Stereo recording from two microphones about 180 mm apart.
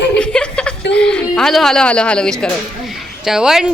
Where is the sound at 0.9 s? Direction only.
5° left (ahead or behind).